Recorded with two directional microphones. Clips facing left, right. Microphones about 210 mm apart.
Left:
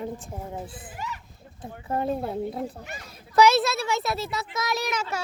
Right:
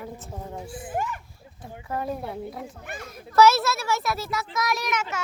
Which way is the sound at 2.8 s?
55° right (ahead or behind).